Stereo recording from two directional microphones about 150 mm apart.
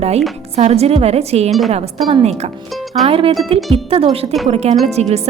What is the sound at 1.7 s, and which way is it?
A woman's voice, 45° right (ahead or behind).